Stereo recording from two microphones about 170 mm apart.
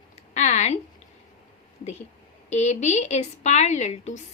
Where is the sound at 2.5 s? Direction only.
40° left (ahead or behind).